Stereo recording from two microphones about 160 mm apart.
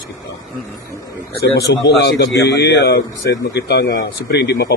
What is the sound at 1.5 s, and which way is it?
Speech, 90° left.